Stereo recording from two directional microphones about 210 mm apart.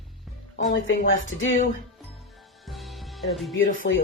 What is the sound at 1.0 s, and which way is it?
Speech, 40° left (ahead or behind).